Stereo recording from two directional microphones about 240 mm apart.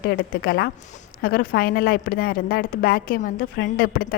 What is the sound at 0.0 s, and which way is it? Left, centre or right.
A woman's voice, left.